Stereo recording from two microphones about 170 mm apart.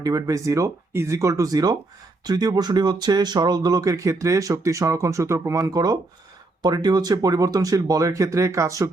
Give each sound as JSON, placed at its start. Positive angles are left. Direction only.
{"t": 0.0, "sound": "speech", "side_deg": -20}